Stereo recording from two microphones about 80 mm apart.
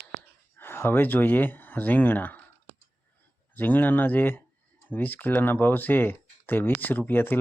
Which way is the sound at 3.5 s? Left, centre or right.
Left.